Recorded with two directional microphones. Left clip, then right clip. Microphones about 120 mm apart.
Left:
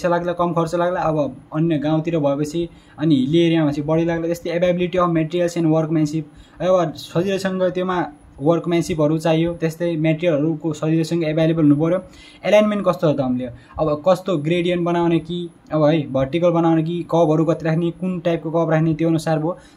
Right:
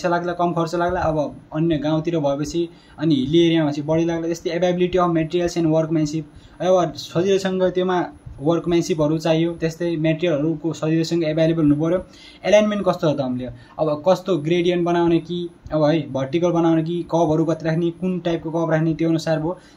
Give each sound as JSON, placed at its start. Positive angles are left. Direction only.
{"t": 0.0, "sound": "speech", "side_deg": 30}